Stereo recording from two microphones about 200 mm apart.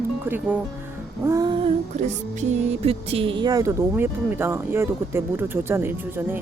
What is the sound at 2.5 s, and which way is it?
Speech, 30° right (ahead or behind).